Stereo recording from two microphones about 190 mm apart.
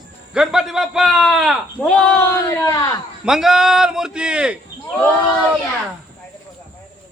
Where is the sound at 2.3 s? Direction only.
15° left (ahead or behind).